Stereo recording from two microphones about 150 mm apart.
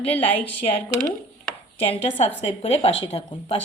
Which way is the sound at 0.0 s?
40° left (ahead or behind).